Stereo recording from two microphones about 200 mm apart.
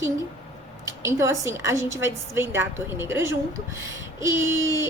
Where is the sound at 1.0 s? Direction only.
15° right (ahead or behind).